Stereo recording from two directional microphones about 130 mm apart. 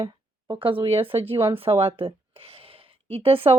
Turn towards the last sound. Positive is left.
turn(degrees=-45)  # may be behind; listen again after turning